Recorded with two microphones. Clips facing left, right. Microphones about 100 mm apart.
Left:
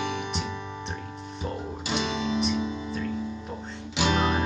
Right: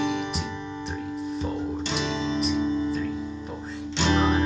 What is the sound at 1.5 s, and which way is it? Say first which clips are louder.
Music: right 3 dB; 5° left (ahead or behind).